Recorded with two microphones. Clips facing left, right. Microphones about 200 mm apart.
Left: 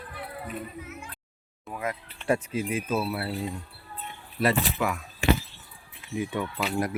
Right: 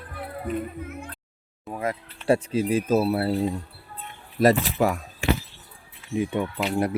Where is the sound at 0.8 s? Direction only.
55° right (ahead or behind).